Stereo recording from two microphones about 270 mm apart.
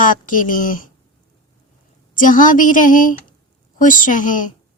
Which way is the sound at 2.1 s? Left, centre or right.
Left.